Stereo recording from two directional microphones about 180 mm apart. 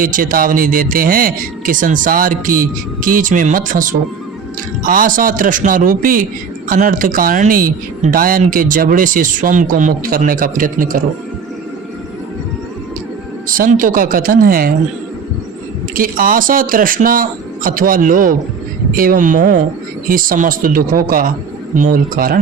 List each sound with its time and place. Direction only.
0.0 s speech: 50° right (ahead or behind)
13.5 s speech: 50° right (ahead or behind)
16.0 s speech: 50° right (ahead or behind)